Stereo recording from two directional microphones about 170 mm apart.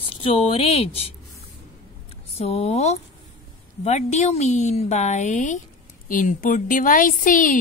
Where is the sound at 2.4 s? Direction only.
40° left (ahead or behind).